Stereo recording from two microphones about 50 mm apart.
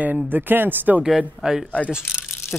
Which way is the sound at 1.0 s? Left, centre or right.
Right.